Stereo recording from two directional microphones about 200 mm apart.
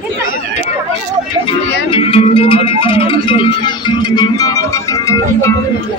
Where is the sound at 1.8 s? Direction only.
30° left (ahead or behind).